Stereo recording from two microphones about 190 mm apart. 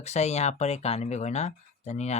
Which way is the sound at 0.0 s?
35° left (ahead or behind).